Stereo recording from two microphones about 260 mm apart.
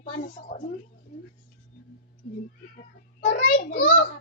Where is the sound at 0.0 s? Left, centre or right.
Left.